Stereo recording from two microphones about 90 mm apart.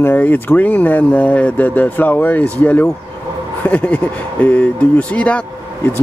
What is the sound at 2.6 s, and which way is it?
Speech, 15° left (ahead or behind).